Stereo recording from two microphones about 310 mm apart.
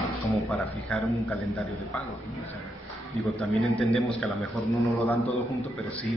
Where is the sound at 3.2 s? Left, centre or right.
Centre.